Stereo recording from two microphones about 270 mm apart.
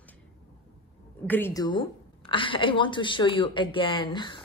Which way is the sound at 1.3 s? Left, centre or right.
Centre.